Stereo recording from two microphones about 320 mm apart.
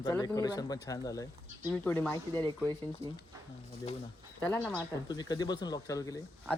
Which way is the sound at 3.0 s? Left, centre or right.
Centre.